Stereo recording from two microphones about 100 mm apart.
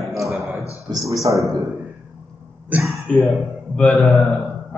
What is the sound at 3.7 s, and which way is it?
Speech, 10° left (ahead or behind).